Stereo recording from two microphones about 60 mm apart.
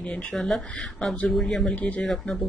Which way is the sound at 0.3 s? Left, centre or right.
Centre.